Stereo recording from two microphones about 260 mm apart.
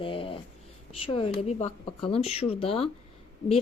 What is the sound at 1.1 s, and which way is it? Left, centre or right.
Speech, left.